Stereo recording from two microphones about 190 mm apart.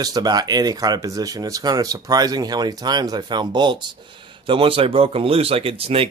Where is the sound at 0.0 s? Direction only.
20° right (ahead or behind).